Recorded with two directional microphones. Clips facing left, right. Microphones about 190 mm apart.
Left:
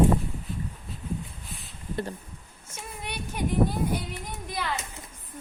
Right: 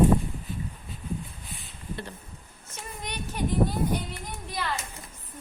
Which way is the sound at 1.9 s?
45° left (ahead or behind).